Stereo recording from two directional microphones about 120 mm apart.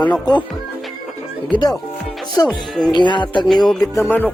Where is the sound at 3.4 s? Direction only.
Centre (ahead or behind).